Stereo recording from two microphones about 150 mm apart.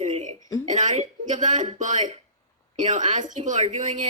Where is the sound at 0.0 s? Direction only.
50° right (ahead or behind).